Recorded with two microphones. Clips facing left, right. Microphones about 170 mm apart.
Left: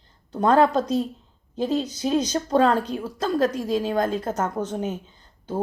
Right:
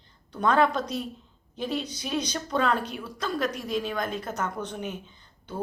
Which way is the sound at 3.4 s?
30° left (ahead or behind).